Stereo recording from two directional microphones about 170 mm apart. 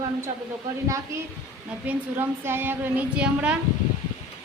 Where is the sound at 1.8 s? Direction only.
15° right (ahead or behind).